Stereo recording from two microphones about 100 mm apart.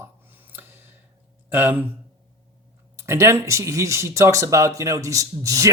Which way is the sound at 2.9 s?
30° right (ahead or behind).